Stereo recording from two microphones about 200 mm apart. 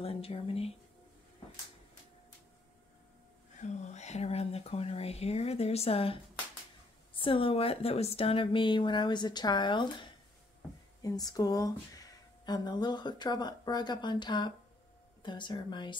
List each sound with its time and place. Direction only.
0.0 s speech: 30° left (ahead or behind)
3.5 s speech: 35° left (ahead or behind)
7.2 s speech: 25° left (ahead or behind)